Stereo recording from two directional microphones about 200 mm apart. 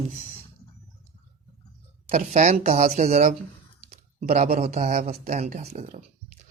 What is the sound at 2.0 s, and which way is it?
Speech, 35° right (ahead or behind).